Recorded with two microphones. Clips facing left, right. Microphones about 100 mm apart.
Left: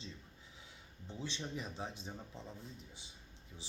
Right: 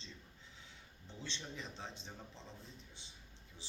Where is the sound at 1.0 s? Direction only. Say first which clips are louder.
Left 5 dB; 15° left (ahead or behind).